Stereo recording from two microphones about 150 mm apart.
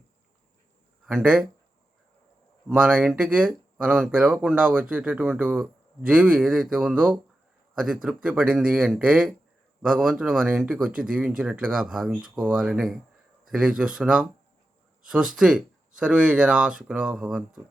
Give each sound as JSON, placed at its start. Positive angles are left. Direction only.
{"t": 1.0, "sound": "speech", "side_deg": -5}
{"t": 2.6, "sound": "speech", "side_deg": -10}
{"t": 15.4, "sound": "speech", "side_deg": -5}